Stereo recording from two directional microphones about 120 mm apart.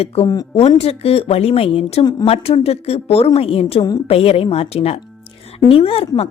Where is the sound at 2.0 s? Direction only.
35° left (ahead or behind).